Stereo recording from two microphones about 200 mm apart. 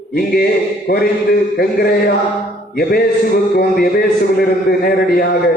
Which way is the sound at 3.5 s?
50° left (ahead or behind).